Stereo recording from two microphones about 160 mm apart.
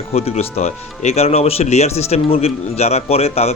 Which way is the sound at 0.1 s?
40° left (ahead or behind).